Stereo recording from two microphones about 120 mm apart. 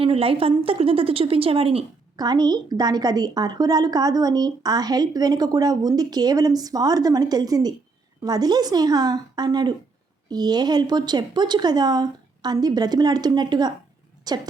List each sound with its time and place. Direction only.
0.0 s a woman's voice: 50° right (ahead or behind)
2.1 s a woman's voice: 35° right (ahead or behind)